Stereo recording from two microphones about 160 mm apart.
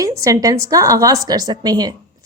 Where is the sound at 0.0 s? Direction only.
20° right (ahead or behind).